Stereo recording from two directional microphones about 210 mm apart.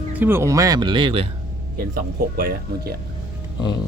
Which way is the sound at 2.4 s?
45° right (ahead or behind).